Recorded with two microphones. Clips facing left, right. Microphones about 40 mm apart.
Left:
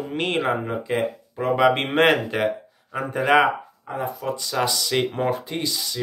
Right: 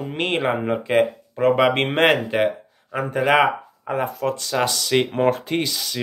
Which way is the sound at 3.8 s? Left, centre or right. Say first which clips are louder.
Right 4 dB; right.